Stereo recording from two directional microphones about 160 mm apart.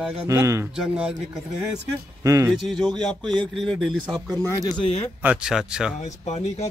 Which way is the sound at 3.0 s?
5° left (ahead or behind).